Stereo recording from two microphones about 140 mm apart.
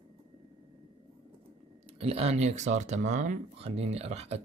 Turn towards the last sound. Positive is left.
turn(degrees=-50)  # may be behind; listen again after turning